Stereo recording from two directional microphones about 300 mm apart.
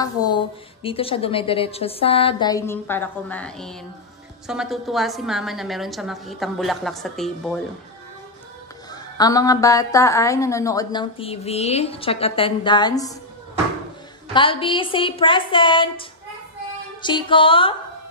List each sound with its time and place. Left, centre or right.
0.0 s a woman's voice: centre
8.9 s a woman's voice: centre
14.3 s a woman's voice: centre